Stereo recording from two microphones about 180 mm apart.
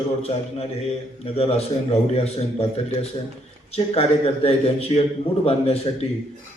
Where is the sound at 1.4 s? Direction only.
35° left (ahead or behind).